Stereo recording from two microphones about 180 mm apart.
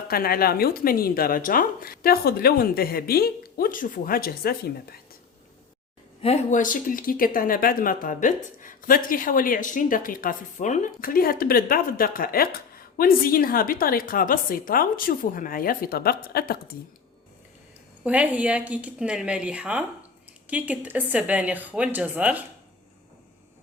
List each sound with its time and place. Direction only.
0.1 s speech: 55° left (ahead or behind)
6.2 s speech: 40° left (ahead or behind); by 16.7 s 60° left (ahead or behind)
18.0 s a woman's voice: 10° right (ahead or behind)